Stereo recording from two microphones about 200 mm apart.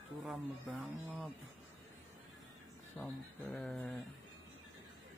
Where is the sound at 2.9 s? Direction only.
5° left (ahead or behind).